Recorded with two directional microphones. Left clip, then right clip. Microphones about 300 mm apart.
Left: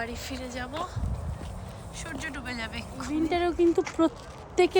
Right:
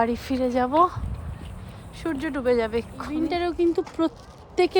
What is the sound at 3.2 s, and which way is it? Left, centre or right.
Speech, centre.